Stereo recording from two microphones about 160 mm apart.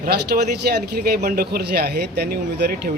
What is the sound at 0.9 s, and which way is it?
A man's voice, 75° right (ahead or behind).